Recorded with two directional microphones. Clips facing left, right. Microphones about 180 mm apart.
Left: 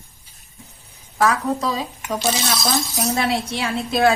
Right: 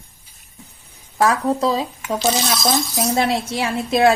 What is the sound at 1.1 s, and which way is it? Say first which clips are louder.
A woman's voice: right 2 dB; 30° right (ahead or behind).